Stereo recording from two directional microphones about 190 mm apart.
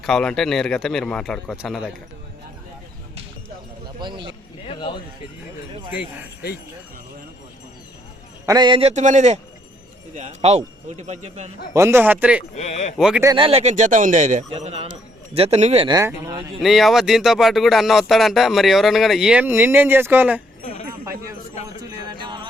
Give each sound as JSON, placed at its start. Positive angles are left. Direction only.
{"t": 0.0, "sound": "speech", "side_deg": 5}
{"t": 4.0, "sound": "speech", "side_deg": -25}
{"t": 4.6, "sound": "a sound", "side_deg": 30}
{"t": 6.0, "sound": "speech", "side_deg": 55}
{"t": 8.4, "sound": "a man's voice", "side_deg": -20}
{"t": 8.9, "sound": "a man's voice", "side_deg": -40}
{"t": 11.7, "sound": "a man's voice", "side_deg": -15}
{"t": 12.5, "sound": "speech", "side_deg": 35}
{"t": 13.0, "sound": "speech", "side_deg": -5}
{"t": 13.2, "sound": "a man's voice", "side_deg": -25}
{"t": 15.9, "sound": "a man's voice", "side_deg": -15}
{"t": 16.6, "sound": "speech", "side_deg": 0}
{"t": 22.2, "sound": "jingle bell", "side_deg": -25}